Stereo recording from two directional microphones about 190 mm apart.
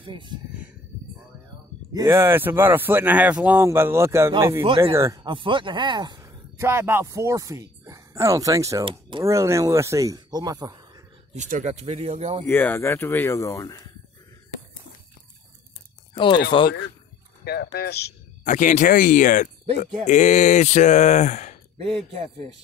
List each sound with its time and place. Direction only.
0.0 s speech: 25° right (ahead or behind)
2.0 s speech: 15° right (ahead or behind)
4.6 s speech: 30° right (ahead or behind)
4.9 s speech: 15° right (ahead or behind)
11.3 s speech: 40° right (ahead or behind)
12.4 s speech: 10° left (ahead or behind)
16.5 s speech: 25° left (ahead or behind)
17.5 s speech: 60° left (ahead or behind)
18.4 s speech: 40° left (ahead or behind)